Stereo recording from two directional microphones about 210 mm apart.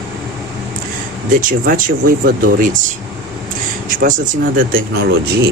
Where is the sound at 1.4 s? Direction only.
40° right (ahead or behind).